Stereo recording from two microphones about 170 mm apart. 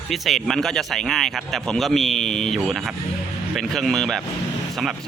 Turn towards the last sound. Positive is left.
turn(degrees=0)  # may be behind; listen again after turning